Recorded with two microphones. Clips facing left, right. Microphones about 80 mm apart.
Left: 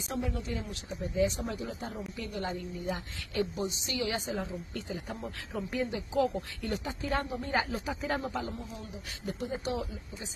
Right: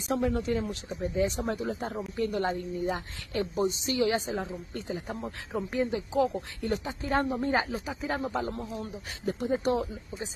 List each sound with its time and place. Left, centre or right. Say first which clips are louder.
0.1 s speech: right 8 dB; right
1.7 s speech: right 6 dB; right
2.1 s a woman's voice: right 9 dB; right
7.1 s a woman's voice: right 5 dB; right
7.8 s speech: even; centre
8.1 s speech: right 4 dB; right
9.4 s speech: right 7 dB; right